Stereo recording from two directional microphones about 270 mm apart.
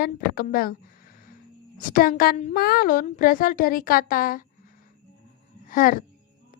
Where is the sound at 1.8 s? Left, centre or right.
Left.